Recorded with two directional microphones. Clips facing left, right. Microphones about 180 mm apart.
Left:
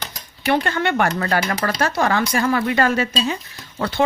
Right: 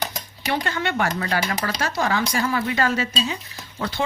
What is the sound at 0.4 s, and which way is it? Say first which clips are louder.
Speech: left 5 dB; 60° left (ahead or behind).